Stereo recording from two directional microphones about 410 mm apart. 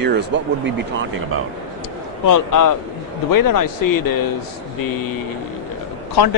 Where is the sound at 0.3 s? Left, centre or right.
Right.